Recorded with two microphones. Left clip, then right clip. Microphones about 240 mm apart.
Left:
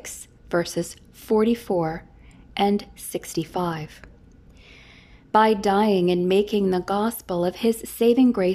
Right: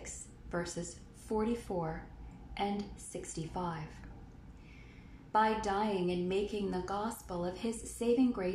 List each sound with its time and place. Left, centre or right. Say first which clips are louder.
0.0 s a woman's voice: left 9 dB; left
5.3 s a woman's voice: left 12 dB; left